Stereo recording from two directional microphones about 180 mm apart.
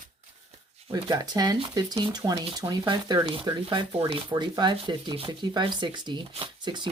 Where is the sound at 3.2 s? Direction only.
30° right (ahead or behind).